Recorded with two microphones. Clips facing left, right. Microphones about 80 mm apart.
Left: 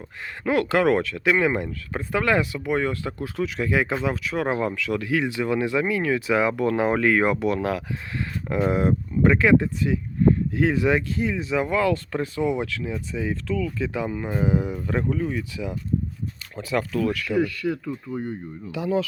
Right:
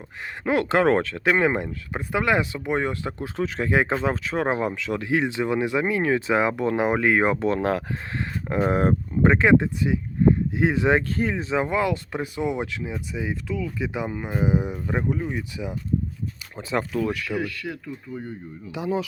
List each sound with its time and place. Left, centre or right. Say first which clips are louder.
0.4 s speech: even; right
11.1 s speech: even; right; by 17.4 s centre
17.8 s speech: left 4 dB; left
18.7 s speech: left 2 dB; right